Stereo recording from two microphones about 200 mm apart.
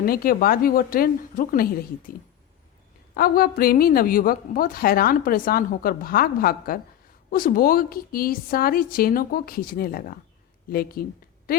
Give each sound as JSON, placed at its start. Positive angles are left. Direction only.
{"t": 0.0, "sound": "a woman's voice", "side_deg": 45}
{"t": 3.2, "sound": "a woman's voice", "side_deg": 50}